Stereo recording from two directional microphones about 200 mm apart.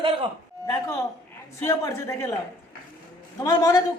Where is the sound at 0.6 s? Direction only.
15° left (ahead or behind).